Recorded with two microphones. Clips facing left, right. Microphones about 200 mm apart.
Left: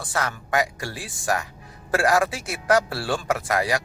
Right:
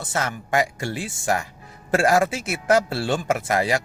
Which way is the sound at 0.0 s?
25° right (ahead or behind).